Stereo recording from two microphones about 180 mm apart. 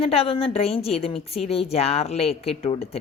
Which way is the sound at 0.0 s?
35° left (ahead or behind).